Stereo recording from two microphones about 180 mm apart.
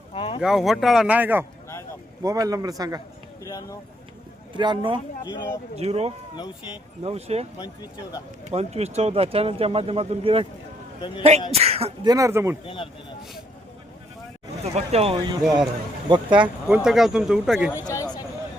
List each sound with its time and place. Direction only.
0.1 s boat: 30° left (ahead or behind)
0.4 s speech: centre (ahead or behind); by 3.0 s 20° right (ahead or behind)
3.4 s speech: 20° left (ahead or behind)
4.5 s speech: 25° right (ahead or behind)
8.4 s speech: 35° right (ahead or behind)
12.0 s speech: 20° right (ahead or behind)
12.6 s speech: 30° left (ahead or behind)
14.6 s speech: 35° right (ahead or behind)
15.4 s speech: 5° right (ahead or behind)
16.0 s speech: 25° right (ahead or behind)
16.4 s speech: 5° right (ahead or behind)